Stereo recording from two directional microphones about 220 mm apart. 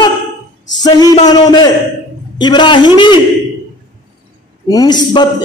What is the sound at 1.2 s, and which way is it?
Speech, 20° left (ahead or behind).